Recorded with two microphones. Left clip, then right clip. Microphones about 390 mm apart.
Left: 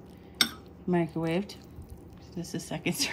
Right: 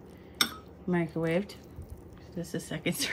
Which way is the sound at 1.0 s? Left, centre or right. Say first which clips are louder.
Right 3 dB; centre.